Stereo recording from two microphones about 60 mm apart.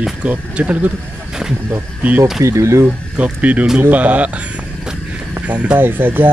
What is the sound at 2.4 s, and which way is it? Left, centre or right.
Speech, right.